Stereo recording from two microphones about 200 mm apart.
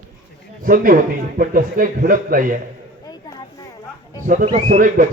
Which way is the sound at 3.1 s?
20° left (ahead or behind).